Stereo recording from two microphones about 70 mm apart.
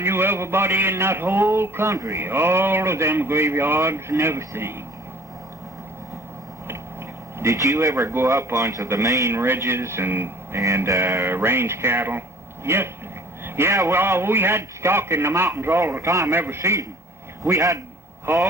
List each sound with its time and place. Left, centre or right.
0.0 s a man's voice: right
7.3 s a man's voice: right
16.3 s a man's voice: right
17.4 s a man's voice: right
18.3 s a man's voice: right